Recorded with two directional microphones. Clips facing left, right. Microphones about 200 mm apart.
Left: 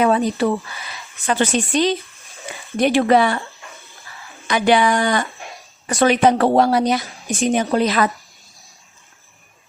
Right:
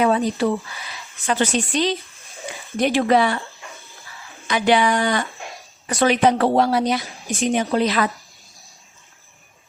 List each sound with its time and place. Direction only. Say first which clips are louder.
0.0 s a woman's voice: left 2 dB; 55° left (ahead or behind)
4.4 s a woman's voice: left 2 dB; 50° left (ahead or behind)